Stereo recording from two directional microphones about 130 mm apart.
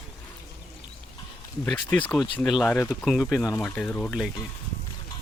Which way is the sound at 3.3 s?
25° left (ahead or behind).